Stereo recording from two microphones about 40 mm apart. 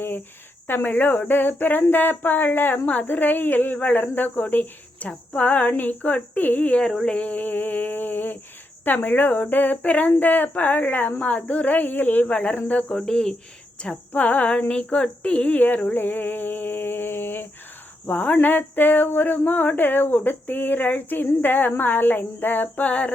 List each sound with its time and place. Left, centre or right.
0.7 s speech: left
1.9 s a sound: left
2.8 s speech: left
3.1 s speech: left
4.9 s speech: left
12.3 s speech: left
12.9 s speech: centre
14.1 s speech: left
15.5 s a sound: left
18.1 s speech: left
18.3 s speech: left
22.7 s speech: left